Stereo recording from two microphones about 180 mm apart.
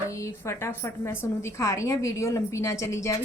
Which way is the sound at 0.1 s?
15° left (ahead or behind).